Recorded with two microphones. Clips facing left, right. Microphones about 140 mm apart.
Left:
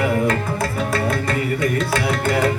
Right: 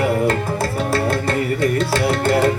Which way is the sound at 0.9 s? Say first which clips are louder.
Right 3 dB; 30° right (ahead or behind).